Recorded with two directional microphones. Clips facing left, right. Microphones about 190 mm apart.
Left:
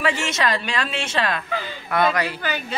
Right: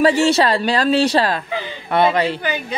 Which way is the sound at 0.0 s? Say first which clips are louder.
Right 9 dB; 35° right (ahead or behind).